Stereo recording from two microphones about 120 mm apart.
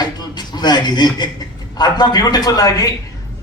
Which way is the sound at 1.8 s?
35° left (ahead or behind).